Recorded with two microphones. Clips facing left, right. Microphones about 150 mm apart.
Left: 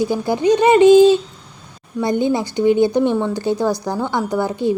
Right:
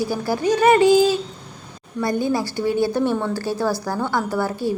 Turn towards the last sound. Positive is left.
turn(degrees=20)  # may be behind; listen again after turning